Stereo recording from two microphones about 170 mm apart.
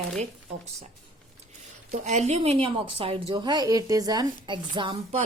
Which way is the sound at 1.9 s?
40° right (ahead or behind).